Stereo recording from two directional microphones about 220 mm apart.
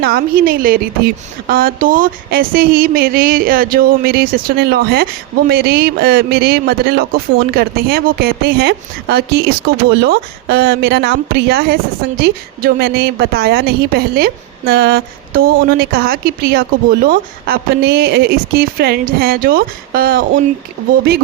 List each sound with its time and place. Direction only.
0.0 s a woman's voice: 40° right (ahead or behind)